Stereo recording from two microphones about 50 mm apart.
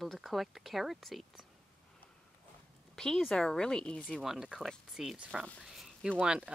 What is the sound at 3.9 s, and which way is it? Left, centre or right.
Speech, left.